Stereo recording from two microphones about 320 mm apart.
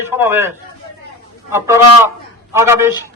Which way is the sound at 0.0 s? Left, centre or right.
Centre.